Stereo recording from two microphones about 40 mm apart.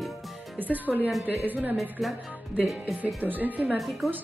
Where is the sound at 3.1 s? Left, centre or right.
Right.